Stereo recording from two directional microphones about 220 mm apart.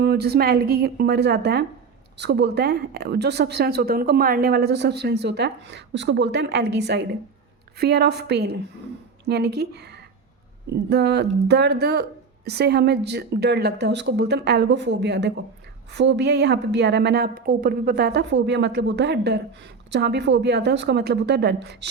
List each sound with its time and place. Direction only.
0.0 s a woman's voice: 45° right (ahead or behind)